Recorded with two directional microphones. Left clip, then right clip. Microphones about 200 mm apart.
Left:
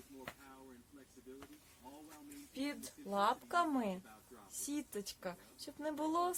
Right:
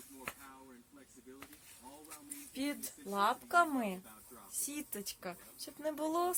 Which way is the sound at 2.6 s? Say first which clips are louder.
Right 3 dB; 15° left (ahead or behind).